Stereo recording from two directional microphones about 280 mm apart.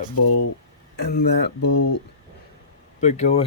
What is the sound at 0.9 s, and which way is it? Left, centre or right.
Speech, left.